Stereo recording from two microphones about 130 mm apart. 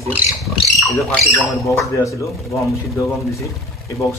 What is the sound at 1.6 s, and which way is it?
A man's voice, 25° left (ahead or behind).